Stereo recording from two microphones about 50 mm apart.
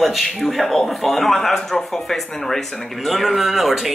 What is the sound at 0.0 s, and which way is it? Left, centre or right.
Speech, centre.